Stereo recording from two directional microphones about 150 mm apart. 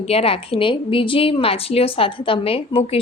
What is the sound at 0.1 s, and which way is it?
A woman's voice, 40° left (ahead or behind).